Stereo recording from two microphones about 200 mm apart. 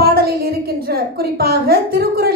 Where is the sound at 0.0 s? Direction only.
50° right (ahead or behind).